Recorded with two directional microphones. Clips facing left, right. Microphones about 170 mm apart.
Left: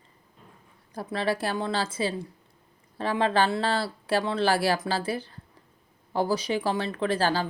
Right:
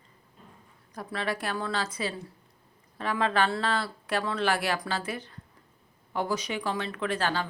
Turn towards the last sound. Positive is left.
turn(degrees=35)  # may be behind; listen again after turning